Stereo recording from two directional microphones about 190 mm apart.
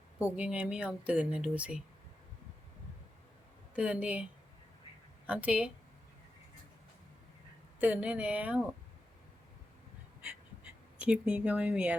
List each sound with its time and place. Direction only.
0.2 s speech: 5° right (ahead or behind)
3.8 s speech: 5° right (ahead or behind)
7.8 s speech: 5° right (ahead or behind)
11.0 s speech: 5° right (ahead or behind)